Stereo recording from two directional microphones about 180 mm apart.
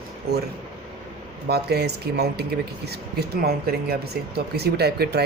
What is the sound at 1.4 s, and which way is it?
Speech, 65° right (ahead or behind).